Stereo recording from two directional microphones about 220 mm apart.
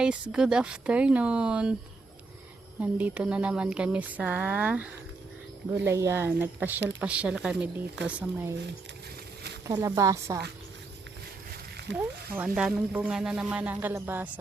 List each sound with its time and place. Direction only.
0.0 s speech: 5° right (ahead or behind)
2.8 s speech: 5° right (ahead or behind)
9.6 s speech: 15° right (ahead or behind)
11.5 s a sound: 50° right (ahead or behind)
12.4 s speech: 5° right (ahead or behind)